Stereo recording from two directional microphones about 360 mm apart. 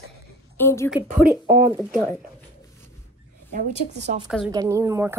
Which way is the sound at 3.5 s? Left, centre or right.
Centre.